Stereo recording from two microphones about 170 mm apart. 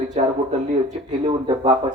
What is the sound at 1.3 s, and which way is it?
Speech, 30° right (ahead or behind).